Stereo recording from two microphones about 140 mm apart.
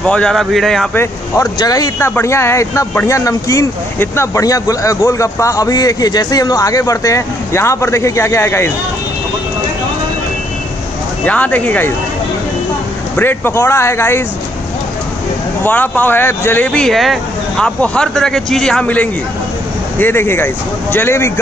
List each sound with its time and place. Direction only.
0.0 s a man's voice: 5° left (ahead or behind)
0.9 s speech: 20° left (ahead or behind)
11.2 s speech: 10° left (ahead or behind)
13.1 s speech: 15° left (ahead or behind)
15.6 s speech: 15° left (ahead or behind)